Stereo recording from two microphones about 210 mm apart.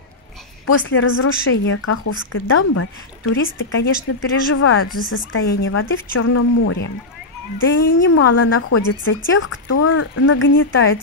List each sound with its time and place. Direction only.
0.8 s speech: 65° left (ahead or behind)
2.3 s a woman's voice: 80° left
3.3 s speech: 70° left (ahead or behind)
4.8 s a woman's voice: 45° left (ahead or behind)
5.1 s speech: 70° left (ahead or behind)
6.1 s a woman's voice: 85° left
9.0 s speech: 70° left (ahead or behind)